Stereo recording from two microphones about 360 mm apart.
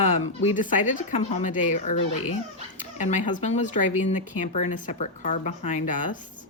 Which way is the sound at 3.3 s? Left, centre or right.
Centre.